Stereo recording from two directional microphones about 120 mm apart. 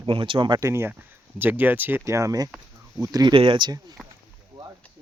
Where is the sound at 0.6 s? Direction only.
20° right (ahead or behind).